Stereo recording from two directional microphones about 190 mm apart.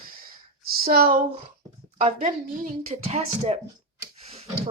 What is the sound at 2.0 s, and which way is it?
Speech, 40° right (ahead or behind).